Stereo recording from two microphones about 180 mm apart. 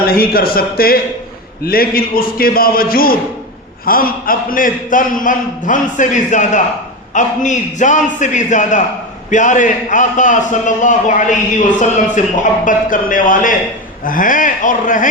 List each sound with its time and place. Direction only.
0.0 s a man's voice: 55° left (ahead or behind)